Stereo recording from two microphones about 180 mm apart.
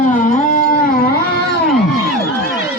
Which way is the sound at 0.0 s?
45° left (ahead or behind).